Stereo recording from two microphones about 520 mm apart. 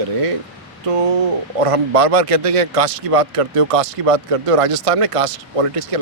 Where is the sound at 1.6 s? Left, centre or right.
Right.